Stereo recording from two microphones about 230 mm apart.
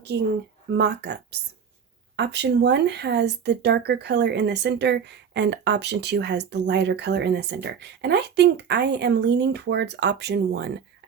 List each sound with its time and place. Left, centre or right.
0.1 s speech: right